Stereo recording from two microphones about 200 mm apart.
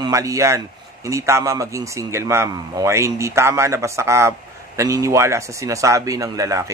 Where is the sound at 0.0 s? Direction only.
15° right (ahead or behind).